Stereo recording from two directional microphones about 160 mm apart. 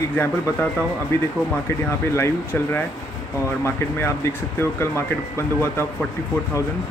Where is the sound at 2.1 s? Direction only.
15° left (ahead or behind).